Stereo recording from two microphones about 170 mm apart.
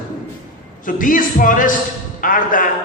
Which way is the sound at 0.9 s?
50° left (ahead or behind).